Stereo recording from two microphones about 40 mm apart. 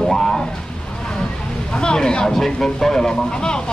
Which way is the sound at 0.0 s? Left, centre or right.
Centre.